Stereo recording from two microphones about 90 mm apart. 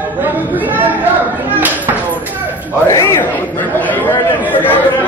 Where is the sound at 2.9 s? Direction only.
30° left (ahead or behind).